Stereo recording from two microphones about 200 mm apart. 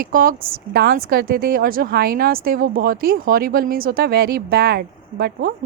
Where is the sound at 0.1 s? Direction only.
45° right (ahead or behind).